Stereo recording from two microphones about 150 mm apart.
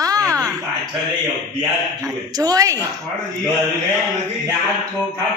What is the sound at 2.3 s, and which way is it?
Speech, 25° right (ahead or behind).